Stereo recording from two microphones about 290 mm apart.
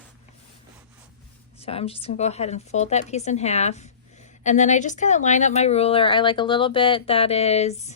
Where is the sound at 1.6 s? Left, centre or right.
Left.